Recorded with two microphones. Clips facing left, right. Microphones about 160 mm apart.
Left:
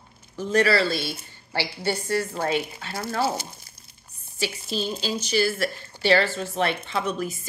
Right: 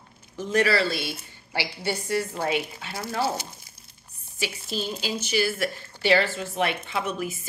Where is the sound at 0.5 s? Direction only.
15° right (ahead or behind).